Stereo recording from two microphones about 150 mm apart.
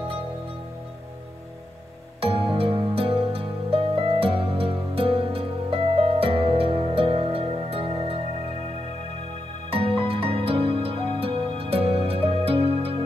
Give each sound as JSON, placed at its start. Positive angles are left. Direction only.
{"t": 2.1, "sound": "music", "side_deg": -40}